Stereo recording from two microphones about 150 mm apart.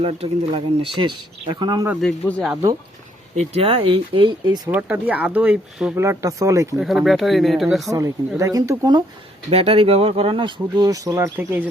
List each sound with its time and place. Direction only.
0.0 s speech: 35° right (ahead or behind)
2.0 s speech: 5° left (ahead or behind)
3.3 s speech: 40° right (ahead or behind)
4.7 s speech: 10° right (ahead or behind)
6.7 s speech: centre (ahead or behind)
7.9 s speech: 20° right (ahead or behind)
9.5 s speech: 45° right (ahead or behind); by 11.7 s 15° right (ahead or behind)